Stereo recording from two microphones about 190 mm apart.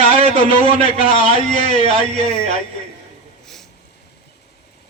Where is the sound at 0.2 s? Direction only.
35° right (ahead or behind).